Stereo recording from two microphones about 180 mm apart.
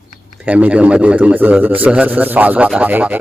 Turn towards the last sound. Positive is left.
turn(degrees=-10)  # may be behind; listen again after turning